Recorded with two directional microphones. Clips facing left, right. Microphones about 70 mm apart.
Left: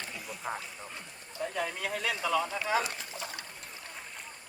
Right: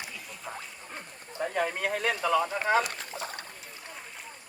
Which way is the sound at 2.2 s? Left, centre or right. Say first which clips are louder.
Right 4 dB; right.